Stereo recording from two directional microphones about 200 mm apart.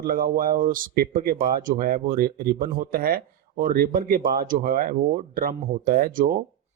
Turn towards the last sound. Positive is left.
turn(degrees=-45)  # may be behind; listen again after turning